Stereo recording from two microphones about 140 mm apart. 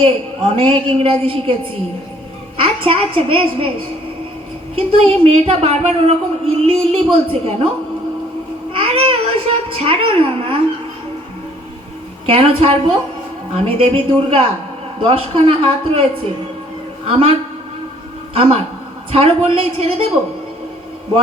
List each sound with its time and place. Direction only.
0.0 s a woman's voice: 40° right (ahead or behind)
2.6 s a woman's voice: 40° right (ahead or behind)
4.7 s a woman's voice: 45° right (ahead or behind)
8.7 s a sound: 45° right (ahead or behind)
12.2 s a woman's voice: 45° right (ahead or behind)
17.1 s a woman's voice: 45° right (ahead or behind)
19.1 s a woman's voice: 45° right (ahead or behind)